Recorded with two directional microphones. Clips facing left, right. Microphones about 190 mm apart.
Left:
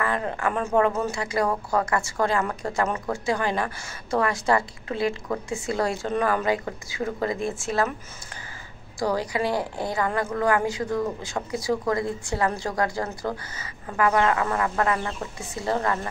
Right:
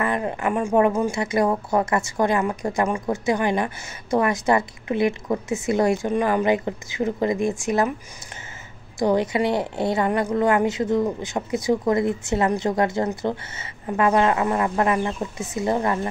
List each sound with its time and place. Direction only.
0.0 s speech: 20° right (ahead or behind)
9.0 s speech: 20° right (ahead or behind)